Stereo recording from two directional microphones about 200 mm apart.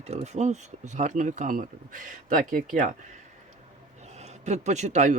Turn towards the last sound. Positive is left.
turn(degrees=-35)  # may be behind; listen again after turning